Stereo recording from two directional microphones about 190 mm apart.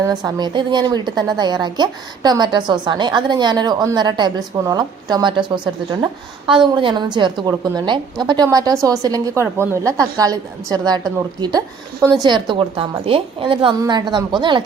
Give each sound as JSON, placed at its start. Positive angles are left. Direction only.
{"t": 0.0, "sound": "speech", "side_deg": -20}